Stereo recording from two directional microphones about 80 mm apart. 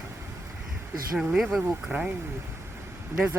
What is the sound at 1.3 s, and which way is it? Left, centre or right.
Speech, centre.